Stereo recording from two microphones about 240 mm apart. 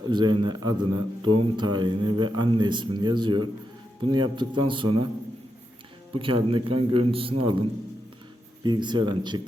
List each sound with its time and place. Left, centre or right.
0.1 s speech: centre
6.1 s speech: right
8.6 s speech: centre